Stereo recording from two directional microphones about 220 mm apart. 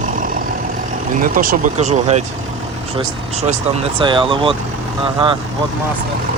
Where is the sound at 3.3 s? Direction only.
30° right (ahead or behind).